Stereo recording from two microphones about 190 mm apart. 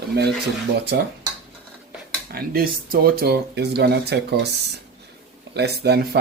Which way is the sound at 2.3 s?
50° right (ahead or behind).